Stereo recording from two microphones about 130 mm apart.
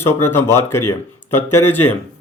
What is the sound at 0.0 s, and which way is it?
Speech, 20° left (ahead or behind).